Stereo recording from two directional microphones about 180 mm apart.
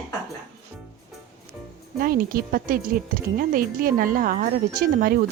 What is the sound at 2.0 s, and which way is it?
A woman's voice, 55° right (ahead or behind).